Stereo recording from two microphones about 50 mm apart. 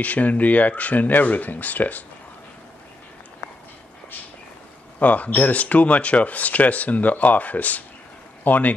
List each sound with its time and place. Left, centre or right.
0.0 s speech: left
4.9 s speech: left